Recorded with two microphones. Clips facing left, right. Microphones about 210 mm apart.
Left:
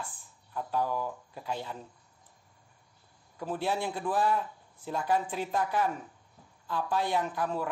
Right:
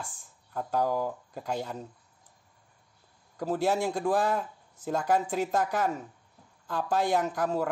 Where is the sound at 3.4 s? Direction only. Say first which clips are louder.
Right 5 dB; 45° right (ahead or behind).